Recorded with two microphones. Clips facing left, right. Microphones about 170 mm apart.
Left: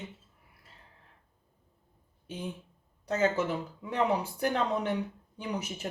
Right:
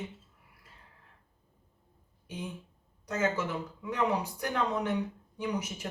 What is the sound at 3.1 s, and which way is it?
Speech, 30° left (ahead or behind).